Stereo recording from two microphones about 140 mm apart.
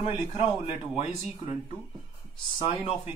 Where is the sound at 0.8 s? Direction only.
5° right (ahead or behind).